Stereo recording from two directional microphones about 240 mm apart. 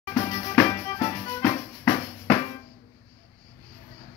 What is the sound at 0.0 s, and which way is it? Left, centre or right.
Drum, centre.